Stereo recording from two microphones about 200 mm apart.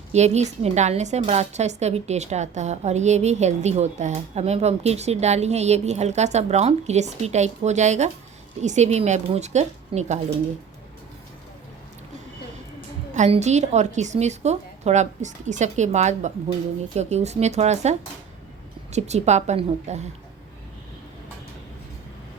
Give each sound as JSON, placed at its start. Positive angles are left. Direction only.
{"t": 0.1, "sound": "a woman's voice", "side_deg": -35}
{"t": 13.1, "sound": "a woman's voice", "side_deg": -35}